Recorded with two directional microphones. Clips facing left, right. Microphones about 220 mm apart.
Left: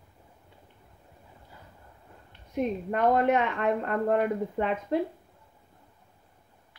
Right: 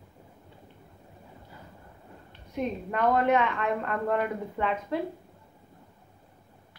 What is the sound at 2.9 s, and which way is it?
Speech, 45° left (ahead or behind).